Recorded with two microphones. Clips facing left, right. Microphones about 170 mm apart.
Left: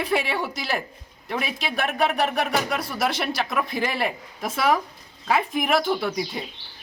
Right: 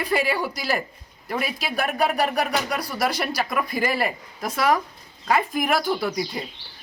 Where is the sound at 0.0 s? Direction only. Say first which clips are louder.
Right 1 dB; centre (ahead or behind).